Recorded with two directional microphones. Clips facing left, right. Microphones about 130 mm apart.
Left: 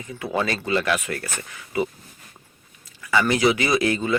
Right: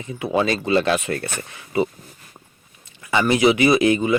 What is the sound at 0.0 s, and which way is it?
Speech, 20° right (ahead or behind).